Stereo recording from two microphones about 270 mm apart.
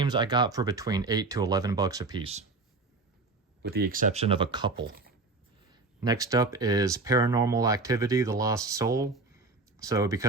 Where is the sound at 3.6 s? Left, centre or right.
Right; by 4.7 s centre.